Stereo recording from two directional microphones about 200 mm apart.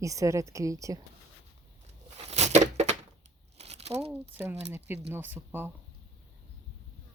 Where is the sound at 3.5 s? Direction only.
30° right (ahead or behind).